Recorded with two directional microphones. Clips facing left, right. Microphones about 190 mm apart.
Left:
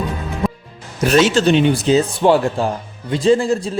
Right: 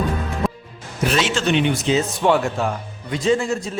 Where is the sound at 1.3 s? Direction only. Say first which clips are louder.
Left 5 dB; 35° left (ahead or behind).